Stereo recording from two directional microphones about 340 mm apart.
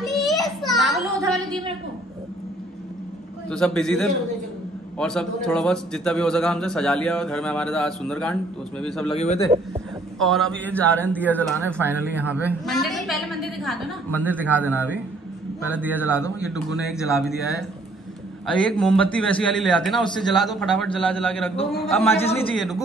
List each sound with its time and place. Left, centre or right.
0.0 s a sound: centre
3.4 s a man's voice: centre
9.1 s a man's voice: centre
10.1 s a man's voice: centre
16.0 s a man's voice: centre
18.5 s a man's voice: centre
22.1 s a man's voice: centre
22.5 s a man's voice: centre